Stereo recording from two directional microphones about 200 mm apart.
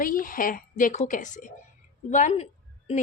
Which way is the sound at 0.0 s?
45° left (ahead or behind).